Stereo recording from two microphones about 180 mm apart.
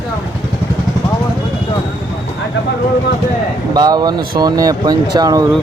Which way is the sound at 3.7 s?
20° right (ahead or behind).